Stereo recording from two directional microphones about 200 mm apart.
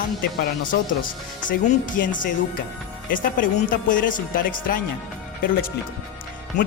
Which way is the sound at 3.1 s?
40° left (ahead or behind).